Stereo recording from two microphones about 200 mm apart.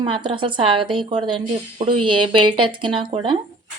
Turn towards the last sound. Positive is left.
turn(degrees=-25)  # may be behind; listen again after turning